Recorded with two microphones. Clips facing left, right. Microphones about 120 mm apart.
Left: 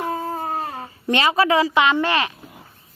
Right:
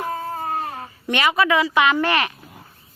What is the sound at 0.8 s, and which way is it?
Speech, 30° left (ahead or behind).